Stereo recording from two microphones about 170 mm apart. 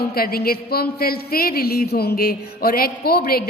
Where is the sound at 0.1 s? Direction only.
60° left (ahead or behind).